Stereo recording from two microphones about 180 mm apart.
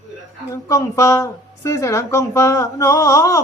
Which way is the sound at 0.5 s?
15° left (ahead or behind).